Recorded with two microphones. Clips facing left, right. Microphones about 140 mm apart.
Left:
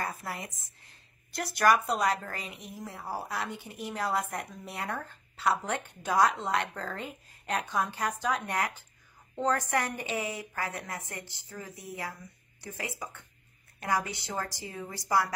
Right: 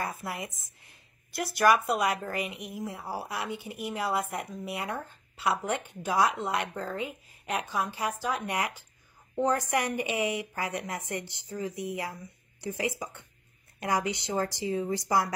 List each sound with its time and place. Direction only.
0.3 s a woman's voice: 15° right (ahead or behind)